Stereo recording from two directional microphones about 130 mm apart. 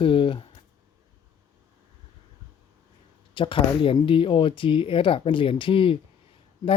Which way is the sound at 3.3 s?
40° left (ahead or behind).